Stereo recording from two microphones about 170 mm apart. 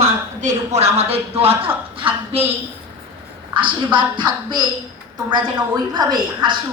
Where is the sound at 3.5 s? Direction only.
30° right (ahead or behind).